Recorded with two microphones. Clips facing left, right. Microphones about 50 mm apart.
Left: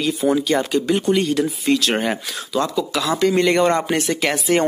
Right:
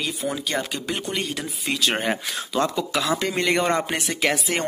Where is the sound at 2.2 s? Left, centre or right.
Right.